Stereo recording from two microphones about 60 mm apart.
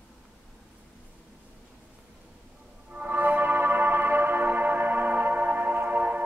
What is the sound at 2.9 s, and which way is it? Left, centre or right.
Music, right.